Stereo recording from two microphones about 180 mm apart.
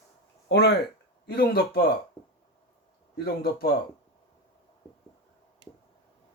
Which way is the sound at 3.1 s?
60° left (ahead or behind).